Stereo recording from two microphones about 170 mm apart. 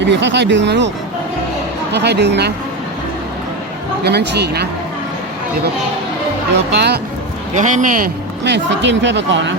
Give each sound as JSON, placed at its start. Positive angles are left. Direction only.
{"t": 0.0, "sound": "speech", "side_deg": -90}
{"t": 1.9, "sound": "speech", "side_deg": -80}
{"t": 4.0, "sound": "speech", "side_deg": -80}
{"t": 6.7, "sound": "speech", "side_deg": -75}
{"t": 7.5, "sound": "speech", "side_deg": -45}
{"t": 8.4, "sound": "speech", "side_deg": -90}